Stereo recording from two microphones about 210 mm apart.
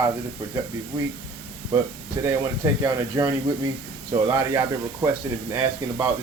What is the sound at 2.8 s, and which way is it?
Speech, 15° right (ahead or behind).